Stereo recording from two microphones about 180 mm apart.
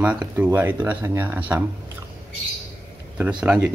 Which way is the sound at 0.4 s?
10° right (ahead or behind).